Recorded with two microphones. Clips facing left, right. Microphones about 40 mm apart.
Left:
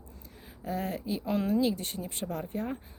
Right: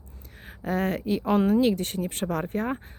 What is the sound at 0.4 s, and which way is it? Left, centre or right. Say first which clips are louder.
Speech: right 7 dB; right.